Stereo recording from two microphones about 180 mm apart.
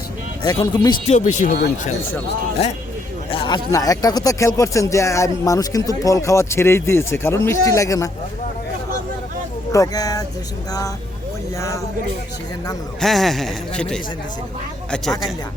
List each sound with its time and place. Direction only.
0.4 s speech: 20° left (ahead or behind)
1.0 s speech: 40° left (ahead or behind)
3.2 s speech: 25° left (ahead or behind)
9.7 s speech: 20° left (ahead or behind)
13.0 s speech: centre (ahead or behind)